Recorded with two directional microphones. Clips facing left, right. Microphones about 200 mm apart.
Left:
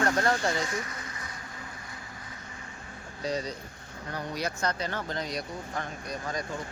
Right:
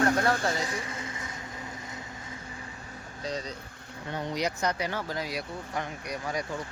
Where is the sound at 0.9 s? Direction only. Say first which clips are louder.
Right 4 dB; 25° right (ahead or behind).